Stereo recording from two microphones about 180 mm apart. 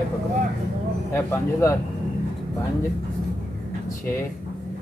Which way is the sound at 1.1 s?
15° left (ahead or behind).